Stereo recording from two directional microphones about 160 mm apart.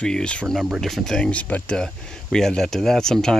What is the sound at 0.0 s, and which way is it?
Speech, 5° left (ahead or behind).